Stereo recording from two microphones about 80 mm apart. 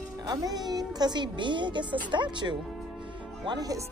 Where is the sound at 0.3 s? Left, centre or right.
Right.